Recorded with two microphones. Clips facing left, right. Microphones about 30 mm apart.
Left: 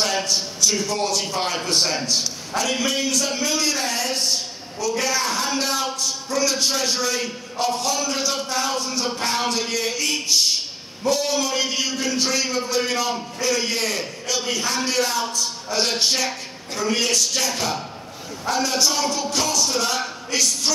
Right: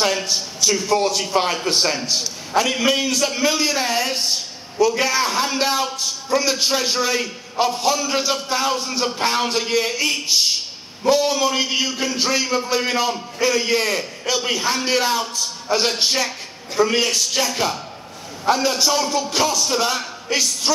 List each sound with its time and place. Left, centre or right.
0.0 s a sound: centre
0.3 s a man's voice: centre
18.7 s a man's voice: centre